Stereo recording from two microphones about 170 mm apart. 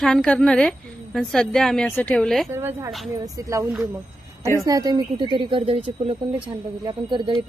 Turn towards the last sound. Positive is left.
turn(degrees=-30)  # may be behind; listen again after turning